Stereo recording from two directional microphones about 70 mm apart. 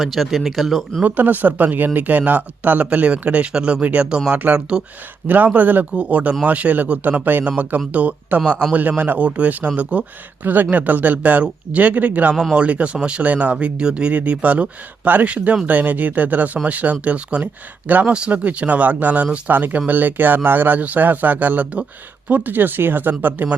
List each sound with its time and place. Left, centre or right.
0.0 s speech: centre
1.0 s speech: right
12.3 s speech: centre
12.5 s speech: centre